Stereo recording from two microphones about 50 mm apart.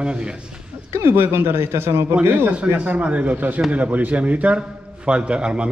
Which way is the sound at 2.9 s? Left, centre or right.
Right.